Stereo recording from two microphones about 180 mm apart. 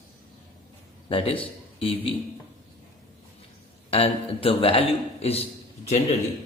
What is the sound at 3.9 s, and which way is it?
A man's voice, 30° left (ahead or behind).